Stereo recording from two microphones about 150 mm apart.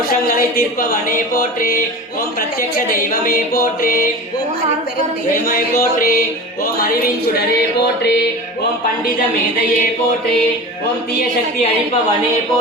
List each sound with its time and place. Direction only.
0.5 s speech: 70° left (ahead or behind)
5.5 s speech: 75° left (ahead or behind)
6.7 s a sound: 85° left